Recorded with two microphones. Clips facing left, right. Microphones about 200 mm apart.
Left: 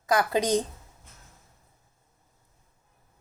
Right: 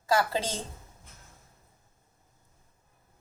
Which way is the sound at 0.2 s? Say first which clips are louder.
Left 6 dB; 15° left (ahead or behind).